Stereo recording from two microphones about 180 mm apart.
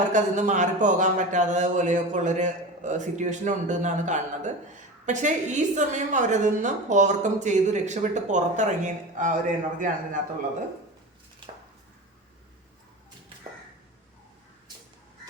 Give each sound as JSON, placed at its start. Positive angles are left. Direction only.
{"t": 0.1, "sound": "speech", "side_deg": -40}